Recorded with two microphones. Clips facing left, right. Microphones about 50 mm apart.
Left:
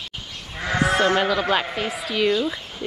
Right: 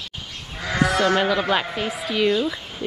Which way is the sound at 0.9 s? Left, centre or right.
Left.